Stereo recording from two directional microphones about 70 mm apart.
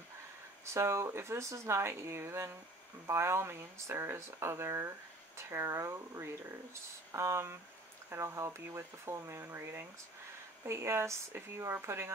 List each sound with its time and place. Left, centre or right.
0.7 s speech: right